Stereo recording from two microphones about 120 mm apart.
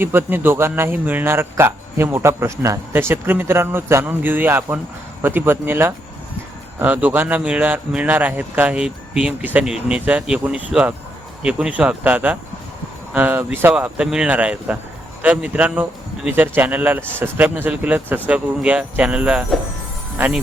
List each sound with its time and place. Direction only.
0.0 s speech: 20° right (ahead or behind)